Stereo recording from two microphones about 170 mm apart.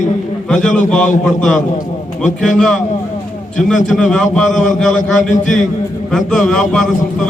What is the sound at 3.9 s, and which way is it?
Speech, 5° left (ahead or behind).